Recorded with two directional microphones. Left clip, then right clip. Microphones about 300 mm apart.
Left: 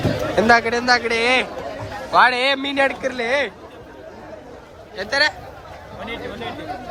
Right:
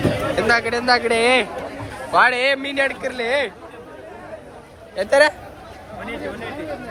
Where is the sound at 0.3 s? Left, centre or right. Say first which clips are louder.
Left 5 dB; centre.